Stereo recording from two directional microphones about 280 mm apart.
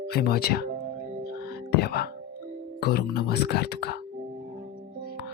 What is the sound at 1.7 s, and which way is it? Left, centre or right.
Speech, left.